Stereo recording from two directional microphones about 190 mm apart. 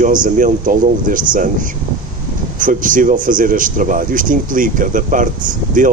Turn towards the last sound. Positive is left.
turn(degrees=-45)  # may be behind; listen again after turning